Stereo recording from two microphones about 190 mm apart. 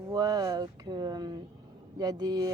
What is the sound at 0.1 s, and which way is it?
Speech, 20° right (ahead or behind).